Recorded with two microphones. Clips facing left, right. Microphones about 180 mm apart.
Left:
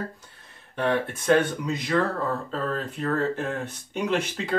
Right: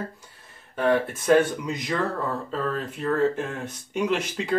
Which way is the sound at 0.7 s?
Centre (ahead or behind).